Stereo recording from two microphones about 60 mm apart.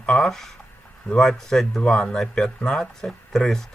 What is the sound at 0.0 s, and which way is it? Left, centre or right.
Speech, centre.